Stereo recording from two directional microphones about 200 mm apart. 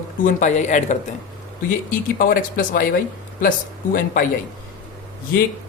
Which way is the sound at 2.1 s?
45° left (ahead or behind).